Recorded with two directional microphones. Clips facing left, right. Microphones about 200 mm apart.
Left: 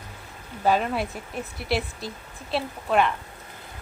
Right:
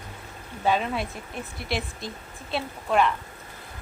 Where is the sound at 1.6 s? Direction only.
35° left (ahead or behind).